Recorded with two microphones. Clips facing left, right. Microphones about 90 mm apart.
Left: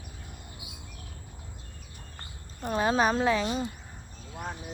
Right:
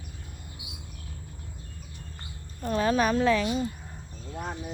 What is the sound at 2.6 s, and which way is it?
Speech, 20° left (ahead or behind).